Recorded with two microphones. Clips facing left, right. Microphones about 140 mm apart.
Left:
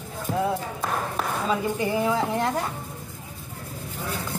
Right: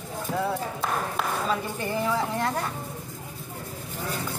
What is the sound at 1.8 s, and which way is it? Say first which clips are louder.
Speech: left 3 dB; 15° left (ahead or behind).